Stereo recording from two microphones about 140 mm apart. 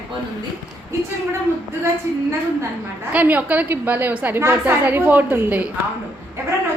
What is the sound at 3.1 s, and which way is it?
A woman's voice, 10° right (ahead or behind).